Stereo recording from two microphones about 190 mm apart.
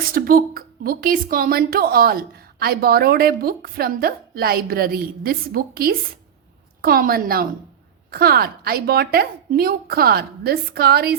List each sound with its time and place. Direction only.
0.1 s a woman's voice: 50° right (ahead or behind)